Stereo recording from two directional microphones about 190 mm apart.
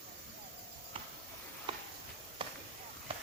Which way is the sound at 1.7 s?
25° right (ahead or behind).